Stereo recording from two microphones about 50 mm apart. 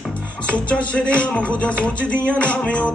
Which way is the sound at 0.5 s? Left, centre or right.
Left.